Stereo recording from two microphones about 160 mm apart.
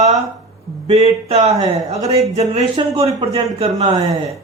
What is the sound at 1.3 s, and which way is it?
Speech, 45° right (ahead or behind).